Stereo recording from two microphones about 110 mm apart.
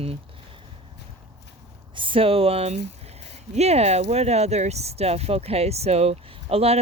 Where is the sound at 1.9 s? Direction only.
50° right (ahead or behind).